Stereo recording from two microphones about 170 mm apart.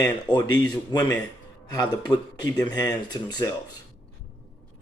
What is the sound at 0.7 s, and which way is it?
Speech, 25° left (ahead or behind).